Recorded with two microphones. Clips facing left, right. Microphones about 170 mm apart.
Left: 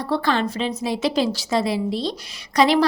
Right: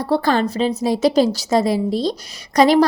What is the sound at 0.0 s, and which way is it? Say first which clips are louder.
A woman's voice: right 4 dB; 40° right (ahead or behind).